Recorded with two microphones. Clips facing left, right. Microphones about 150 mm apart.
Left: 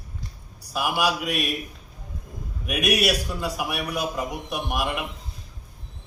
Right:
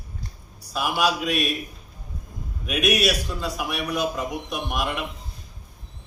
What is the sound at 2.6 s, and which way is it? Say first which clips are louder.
A man's voice: right 1 dB; 10° left (ahead or behind).